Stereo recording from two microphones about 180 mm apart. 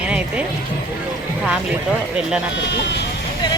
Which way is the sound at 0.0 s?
5° right (ahead or behind).